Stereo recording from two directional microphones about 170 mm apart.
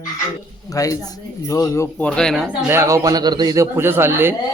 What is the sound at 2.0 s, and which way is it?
Speech, 5° left (ahead or behind).